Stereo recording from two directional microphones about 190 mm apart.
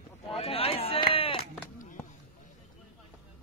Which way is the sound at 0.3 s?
30° left (ahead or behind).